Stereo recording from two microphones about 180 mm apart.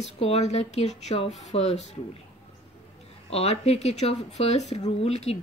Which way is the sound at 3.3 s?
35° left (ahead or behind).